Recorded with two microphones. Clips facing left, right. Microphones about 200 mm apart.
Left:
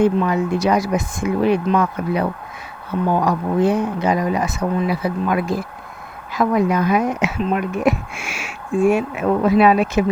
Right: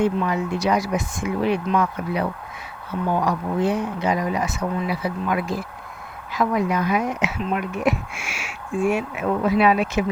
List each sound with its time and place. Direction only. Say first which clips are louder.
0.0 s speech: left 5 dB; 45° left (ahead or behind)